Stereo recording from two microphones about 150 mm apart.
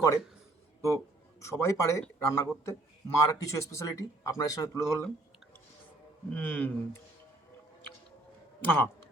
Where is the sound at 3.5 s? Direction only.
20° left (ahead or behind).